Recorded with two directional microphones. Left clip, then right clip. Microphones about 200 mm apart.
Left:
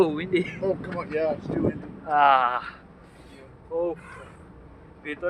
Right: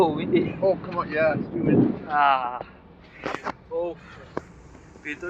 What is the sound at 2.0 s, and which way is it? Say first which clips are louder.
Speech: left 5 dB; 25° left (ahead or behind).